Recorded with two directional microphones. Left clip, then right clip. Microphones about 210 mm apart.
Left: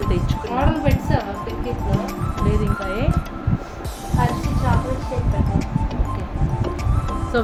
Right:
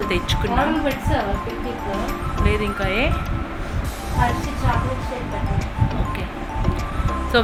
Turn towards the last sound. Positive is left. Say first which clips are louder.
# right 3 dB
turn(degrees=5)  # may be behind; listen again after turning